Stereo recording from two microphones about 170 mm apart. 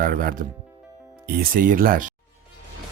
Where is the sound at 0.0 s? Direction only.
55° right (ahead or behind).